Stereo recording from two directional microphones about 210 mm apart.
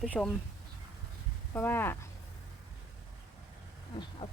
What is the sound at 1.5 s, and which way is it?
Speech, 10° left (ahead or behind).